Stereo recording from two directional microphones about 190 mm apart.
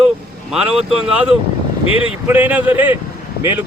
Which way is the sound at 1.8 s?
30° left (ahead or behind).